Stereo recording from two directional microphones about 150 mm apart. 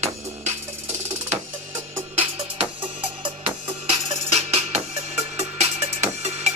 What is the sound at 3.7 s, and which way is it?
Music, 40° right (ahead or behind).